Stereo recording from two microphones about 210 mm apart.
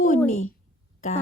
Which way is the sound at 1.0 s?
35° left (ahead or behind).